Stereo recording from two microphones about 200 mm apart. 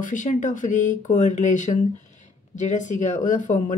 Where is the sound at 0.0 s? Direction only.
40° left (ahead or behind).